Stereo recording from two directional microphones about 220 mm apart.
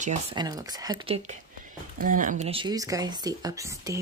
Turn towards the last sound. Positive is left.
turn(degrees=-15)  # may be behind; listen again after turning